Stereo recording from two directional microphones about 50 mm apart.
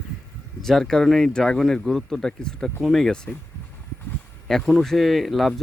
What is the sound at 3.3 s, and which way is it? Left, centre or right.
Speech, left.